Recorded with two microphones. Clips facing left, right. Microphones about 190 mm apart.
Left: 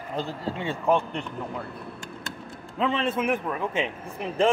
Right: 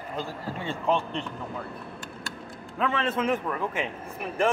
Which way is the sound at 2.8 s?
20° left (ahead or behind).